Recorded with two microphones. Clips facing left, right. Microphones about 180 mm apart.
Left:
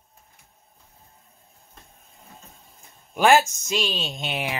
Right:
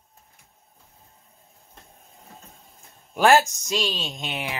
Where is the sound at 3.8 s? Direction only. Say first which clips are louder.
Even; 15° left (ahead or behind).